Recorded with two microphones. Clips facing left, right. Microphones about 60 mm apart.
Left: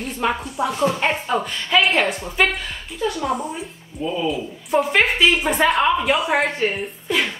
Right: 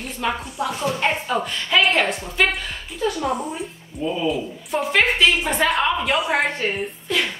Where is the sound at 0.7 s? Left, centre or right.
Centre.